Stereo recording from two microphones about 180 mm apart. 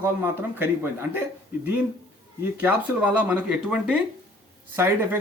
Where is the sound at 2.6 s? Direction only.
10° right (ahead or behind).